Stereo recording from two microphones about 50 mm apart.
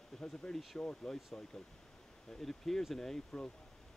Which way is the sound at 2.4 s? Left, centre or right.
Centre.